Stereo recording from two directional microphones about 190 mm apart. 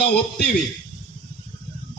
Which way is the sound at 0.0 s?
60° left (ahead or behind).